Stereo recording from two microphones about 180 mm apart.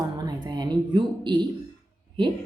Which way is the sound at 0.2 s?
20° right (ahead or behind).